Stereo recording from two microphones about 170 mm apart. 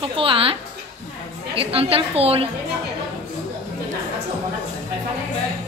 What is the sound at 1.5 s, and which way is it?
Speech, 35° right (ahead or behind).